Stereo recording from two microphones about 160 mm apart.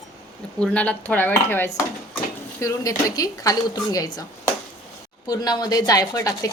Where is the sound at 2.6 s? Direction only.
20° left (ahead or behind).